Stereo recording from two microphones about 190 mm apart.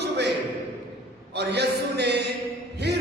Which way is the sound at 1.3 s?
60° right (ahead or behind).